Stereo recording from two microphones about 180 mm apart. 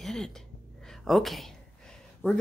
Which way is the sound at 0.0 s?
Centre (ahead or behind).